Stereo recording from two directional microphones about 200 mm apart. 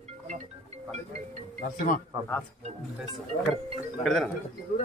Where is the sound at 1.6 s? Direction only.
45° left (ahead or behind).